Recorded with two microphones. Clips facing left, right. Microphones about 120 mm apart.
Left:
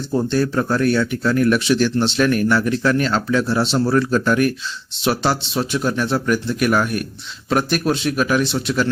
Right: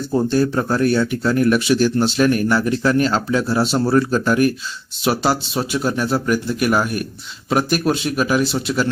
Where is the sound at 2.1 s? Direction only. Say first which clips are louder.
Even; 40° right (ahead or behind).